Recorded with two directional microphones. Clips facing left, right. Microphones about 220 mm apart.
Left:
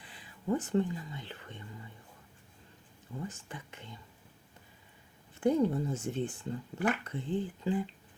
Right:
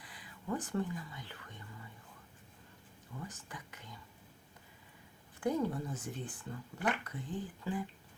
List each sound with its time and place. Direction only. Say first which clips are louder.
0.0 s speech: left 7 dB; 25° left (ahead or behind)
3.2 s speech: left 6 dB; 25° left (ahead or behind)
5.4 s speech: left 6 dB; 25° left (ahead or behind)